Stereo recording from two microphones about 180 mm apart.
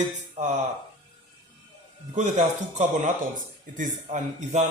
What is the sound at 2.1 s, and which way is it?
Speech, 40° right (ahead or behind).